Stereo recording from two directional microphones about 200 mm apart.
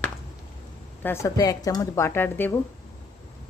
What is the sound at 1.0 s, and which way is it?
A woman's voice, 15° left (ahead or behind).